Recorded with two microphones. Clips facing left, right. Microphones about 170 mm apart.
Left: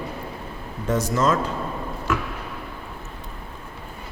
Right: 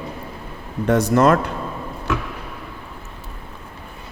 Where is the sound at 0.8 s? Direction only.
65° right (ahead or behind).